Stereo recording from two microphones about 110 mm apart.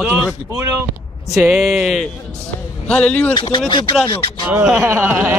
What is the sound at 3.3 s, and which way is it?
Speech, 50° left (ahead or behind).